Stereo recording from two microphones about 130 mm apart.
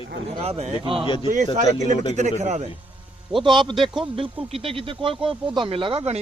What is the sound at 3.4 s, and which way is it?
Speech, 35° right (ahead or behind).